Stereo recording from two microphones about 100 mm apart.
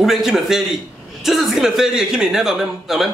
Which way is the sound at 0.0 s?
5° right (ahead or behind).